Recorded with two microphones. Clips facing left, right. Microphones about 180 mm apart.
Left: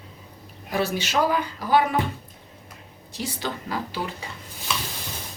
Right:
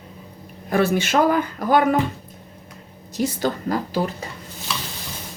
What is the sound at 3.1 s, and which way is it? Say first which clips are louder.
A woman's voice: right 8 dB; 45° right (ahead or behind).